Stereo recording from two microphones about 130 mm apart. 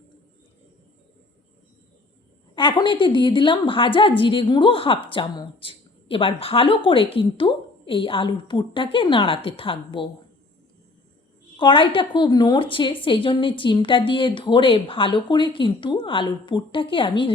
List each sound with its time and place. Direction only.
2.6 s a woman's voice: 40° left (ahead or behind)
11.5 s a woman's voice: 40° left (ahead or behind)